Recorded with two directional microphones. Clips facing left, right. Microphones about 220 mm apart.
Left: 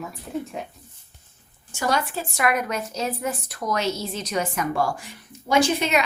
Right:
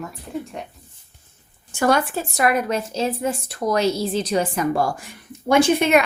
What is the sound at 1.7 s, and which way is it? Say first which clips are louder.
A woman's voice: right 6 dB; 55° right (ahead or behind).